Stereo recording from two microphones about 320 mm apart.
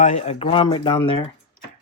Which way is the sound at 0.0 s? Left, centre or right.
Left.